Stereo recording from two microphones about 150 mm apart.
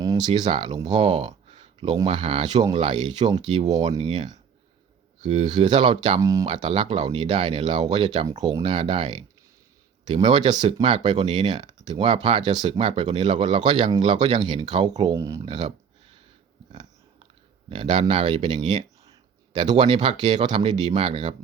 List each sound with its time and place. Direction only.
0.0 s speech: 25° right (ahead or behind)
1.5 s a sound: 40° right (ahead or behind)
2.0 s speech: 35° right (ahead or behind)
4.0 s speech: 50° right (ahead or behind)
5.5 s speech: 30° right (ahead or behind)
6.4 s speech: 35° right (ahead or behind)
17.7 s speech: 35° right (ahead or behind)